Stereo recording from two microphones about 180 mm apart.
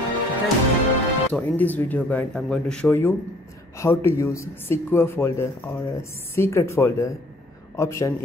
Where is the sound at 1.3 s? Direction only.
10° left (ahead or behind).